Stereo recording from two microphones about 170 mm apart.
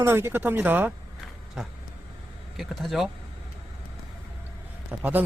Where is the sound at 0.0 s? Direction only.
15° right (ahead or behind).